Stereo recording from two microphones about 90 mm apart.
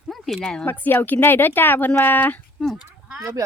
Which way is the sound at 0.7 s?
20° left (ahead or behind).